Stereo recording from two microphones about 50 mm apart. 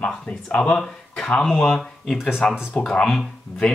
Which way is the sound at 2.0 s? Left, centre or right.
Centre.